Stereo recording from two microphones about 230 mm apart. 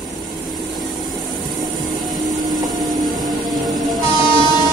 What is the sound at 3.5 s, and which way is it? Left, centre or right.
Music, centre.